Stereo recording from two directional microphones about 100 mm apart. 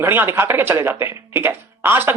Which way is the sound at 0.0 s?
20° right (ahead or behind).